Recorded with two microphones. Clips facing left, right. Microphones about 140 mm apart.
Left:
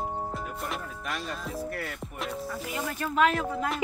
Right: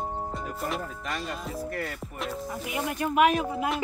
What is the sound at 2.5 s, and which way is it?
Speech, 15° right (ahead or behind).